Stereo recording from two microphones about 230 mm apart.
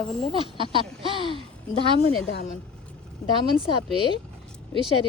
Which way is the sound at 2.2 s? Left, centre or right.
Left.